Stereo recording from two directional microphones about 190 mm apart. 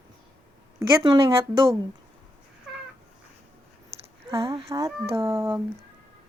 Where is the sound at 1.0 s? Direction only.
25° right (ahead or behind).